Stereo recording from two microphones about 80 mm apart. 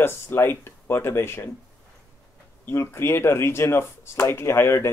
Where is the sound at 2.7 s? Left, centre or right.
Left.